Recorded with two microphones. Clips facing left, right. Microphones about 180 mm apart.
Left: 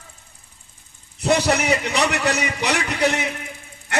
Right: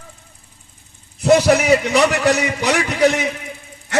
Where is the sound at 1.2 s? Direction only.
60° right (ahead or behind).